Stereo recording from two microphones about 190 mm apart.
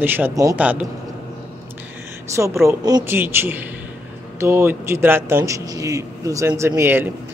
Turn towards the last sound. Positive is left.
turn(degrees=-10)  # may be behind; listen again after turning